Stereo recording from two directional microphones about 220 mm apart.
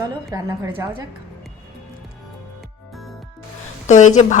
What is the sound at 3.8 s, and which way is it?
Speech, 35° left (ahead or behind).